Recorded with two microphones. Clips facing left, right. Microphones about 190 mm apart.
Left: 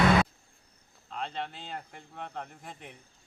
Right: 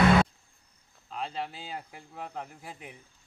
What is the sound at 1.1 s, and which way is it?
Cricket, 5° right (ahead or behind).